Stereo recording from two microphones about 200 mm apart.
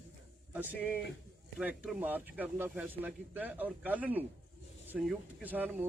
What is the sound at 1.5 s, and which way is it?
Speech, 5° right (ahead or behind).